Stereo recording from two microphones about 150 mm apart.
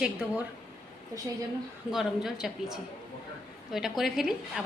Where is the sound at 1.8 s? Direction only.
Centre (ahead or behind).